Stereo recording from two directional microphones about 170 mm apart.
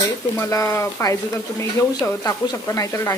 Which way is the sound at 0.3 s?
15° left (ahead or behind).